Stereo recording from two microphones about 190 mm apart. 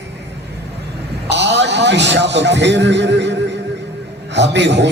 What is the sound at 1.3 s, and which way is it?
A man's voice, 65° right (ahead or behind).